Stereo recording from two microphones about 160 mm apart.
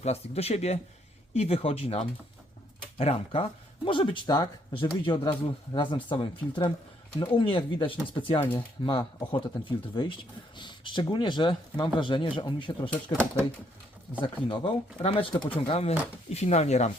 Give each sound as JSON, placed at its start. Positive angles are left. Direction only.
{"t": 0.0, "sound": "speech", "side_deg": 40}
{"t": 14.5, "sound": "speech", "side_deg": 35}